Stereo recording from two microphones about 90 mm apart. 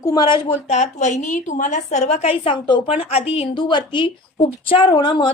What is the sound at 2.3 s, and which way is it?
A woman's voice, 90° left.